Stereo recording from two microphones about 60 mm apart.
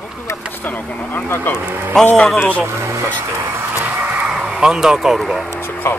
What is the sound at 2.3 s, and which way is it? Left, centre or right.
Speech, left.